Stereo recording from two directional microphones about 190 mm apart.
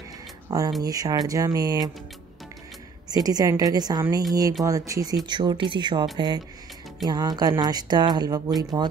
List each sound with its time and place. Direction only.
0.5 s speech: 20° right (ahead or behind)
3.1 s speech: 20° right (ahead or behind)